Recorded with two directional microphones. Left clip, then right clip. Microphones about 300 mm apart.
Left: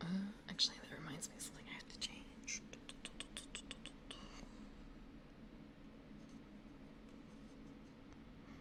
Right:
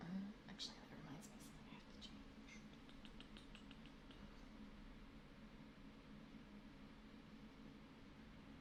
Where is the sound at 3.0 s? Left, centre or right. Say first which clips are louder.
Left 12 dB; left.